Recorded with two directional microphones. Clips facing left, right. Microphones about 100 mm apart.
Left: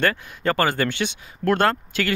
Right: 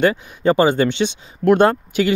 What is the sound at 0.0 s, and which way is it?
Speech, 15° right (ahead or behind).